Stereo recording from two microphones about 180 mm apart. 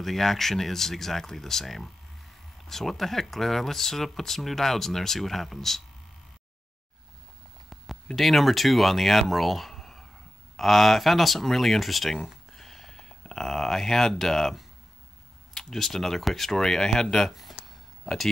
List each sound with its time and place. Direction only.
0.0 s speech: centre (ahead or behind)
7.7 s speech: centre (ahead or behind)
17.6 s a sound: centre (ahead or behind)